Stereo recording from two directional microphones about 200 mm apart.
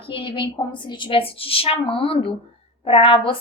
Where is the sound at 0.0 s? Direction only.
25° left (ahead or behind).